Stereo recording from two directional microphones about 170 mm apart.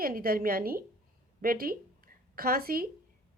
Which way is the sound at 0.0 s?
60° right (ahead or behind).